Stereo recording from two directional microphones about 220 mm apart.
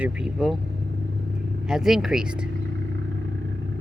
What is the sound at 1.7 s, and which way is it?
Speech, centre (ahead or behind).